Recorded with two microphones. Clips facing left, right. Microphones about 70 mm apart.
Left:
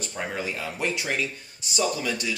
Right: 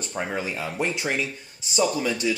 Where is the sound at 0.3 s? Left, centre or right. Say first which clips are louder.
Right 2 dB; right.